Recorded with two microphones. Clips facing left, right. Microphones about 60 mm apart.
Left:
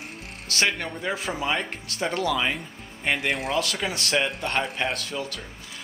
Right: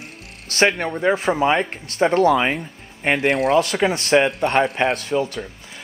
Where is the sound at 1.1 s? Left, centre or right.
Right.